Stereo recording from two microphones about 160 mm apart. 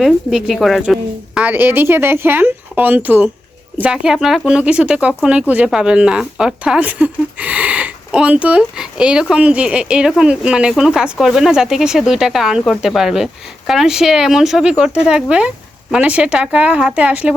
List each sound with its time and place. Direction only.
0.0 s speech: 5° right (ahead or behind)